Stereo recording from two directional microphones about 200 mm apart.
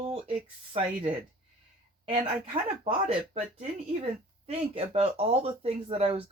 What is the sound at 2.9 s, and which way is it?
Speech, 30° right (ahead or behind).